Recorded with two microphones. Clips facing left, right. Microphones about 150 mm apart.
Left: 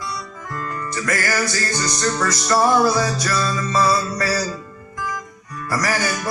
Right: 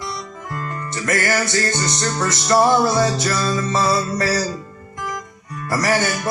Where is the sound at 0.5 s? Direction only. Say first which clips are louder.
Left 1 dB; 25° right (ahead or behind).